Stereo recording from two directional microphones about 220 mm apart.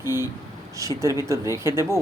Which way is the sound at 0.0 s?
10° right (ahead or behind).